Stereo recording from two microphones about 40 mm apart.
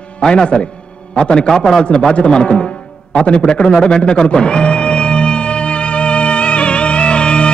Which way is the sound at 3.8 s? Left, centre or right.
Left.